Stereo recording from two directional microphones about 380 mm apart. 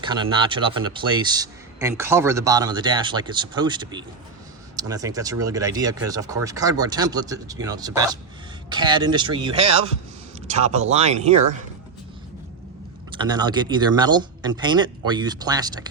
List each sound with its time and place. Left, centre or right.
0.0 s speech: centre
13.1 s speech: centre